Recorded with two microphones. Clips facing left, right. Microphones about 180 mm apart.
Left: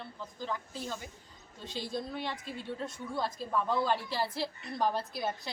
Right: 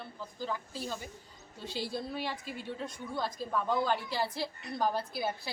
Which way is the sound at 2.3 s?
5° right (ahead or behind).